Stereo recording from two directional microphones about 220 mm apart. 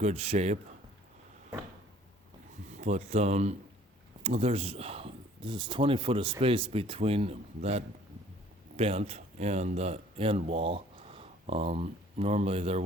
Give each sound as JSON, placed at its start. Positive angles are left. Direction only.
{"t": 0.0, "sound": "speech", "side_deg": -30}
{"t": 2.7, "sound": "speech", "side_deg": -30}